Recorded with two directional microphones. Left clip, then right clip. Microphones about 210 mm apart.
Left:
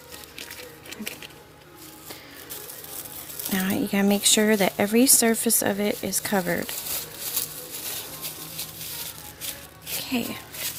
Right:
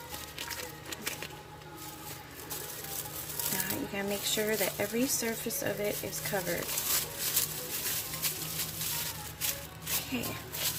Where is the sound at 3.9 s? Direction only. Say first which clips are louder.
Left 11 dB; 50° left (ahead or behind).